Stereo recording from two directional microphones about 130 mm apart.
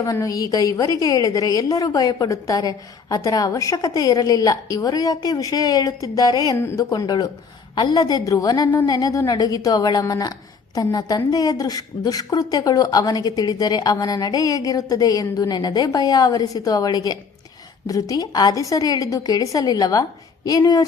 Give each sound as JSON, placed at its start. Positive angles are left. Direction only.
{"t": 0.0, "sound": "a woman's voice", "side_deg": 25}